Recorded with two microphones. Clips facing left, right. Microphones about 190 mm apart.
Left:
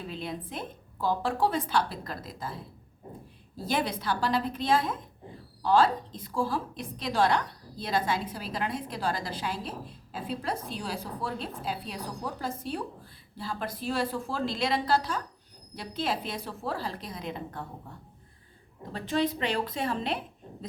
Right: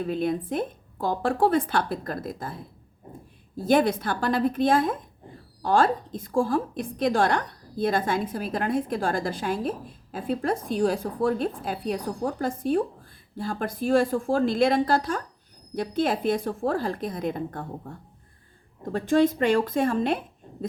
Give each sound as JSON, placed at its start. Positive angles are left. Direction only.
{"t": 0.0, "sound": "a woman's voice", "side_deg": -50}
{"t": 3.7, "sound": "a woman's voice", "side_deg": -50}